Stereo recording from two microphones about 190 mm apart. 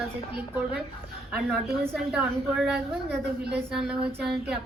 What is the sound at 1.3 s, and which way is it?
A woman's voice, centre (ahead or behind).